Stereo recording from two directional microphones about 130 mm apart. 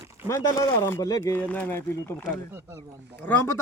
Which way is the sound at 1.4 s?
10° left (ahead or behind).